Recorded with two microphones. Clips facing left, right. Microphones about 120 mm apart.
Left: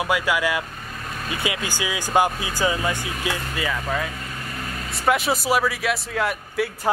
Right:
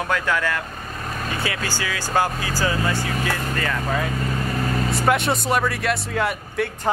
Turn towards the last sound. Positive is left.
turn(degrees=0)  # may be behind; listen again after turning